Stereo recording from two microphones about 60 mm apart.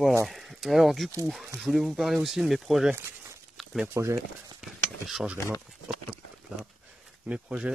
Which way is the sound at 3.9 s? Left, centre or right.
Right.